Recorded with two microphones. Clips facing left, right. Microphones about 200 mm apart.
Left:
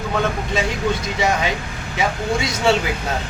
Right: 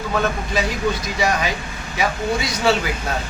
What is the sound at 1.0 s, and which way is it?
A man's voice, 25° left (ahead or behind).